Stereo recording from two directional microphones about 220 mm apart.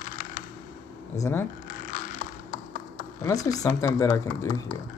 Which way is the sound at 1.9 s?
35° left (ahead or behind).